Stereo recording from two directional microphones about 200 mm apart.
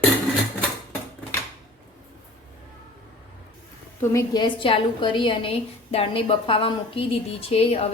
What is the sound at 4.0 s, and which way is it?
A woman's voice, 15° left (ahead or behind).